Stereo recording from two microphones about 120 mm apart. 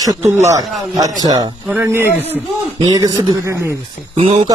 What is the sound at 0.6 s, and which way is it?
Speech, centre (ahead or behind).